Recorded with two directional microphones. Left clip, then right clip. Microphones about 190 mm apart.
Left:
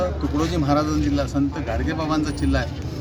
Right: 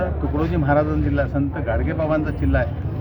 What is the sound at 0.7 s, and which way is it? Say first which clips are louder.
Speech: right 3 dB; 5° left (ahead or behind).